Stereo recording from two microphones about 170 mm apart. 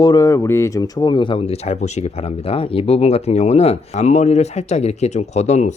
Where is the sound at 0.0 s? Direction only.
20° left (ahead or behind).